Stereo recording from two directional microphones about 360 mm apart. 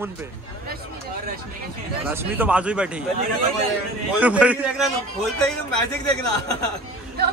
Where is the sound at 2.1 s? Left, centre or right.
Centre.